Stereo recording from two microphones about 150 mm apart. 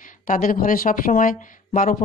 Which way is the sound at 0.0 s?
60° left (ahead or behind).